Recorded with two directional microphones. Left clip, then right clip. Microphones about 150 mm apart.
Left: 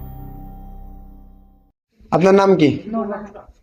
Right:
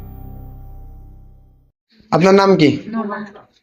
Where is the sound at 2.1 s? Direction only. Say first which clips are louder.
Right 1 dB; 5° left (ahead or behind).